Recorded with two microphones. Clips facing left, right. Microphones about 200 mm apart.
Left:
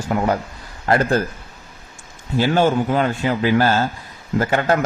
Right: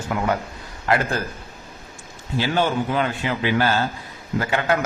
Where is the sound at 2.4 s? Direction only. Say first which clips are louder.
Left 5 dB; 45° left (ahead or behind).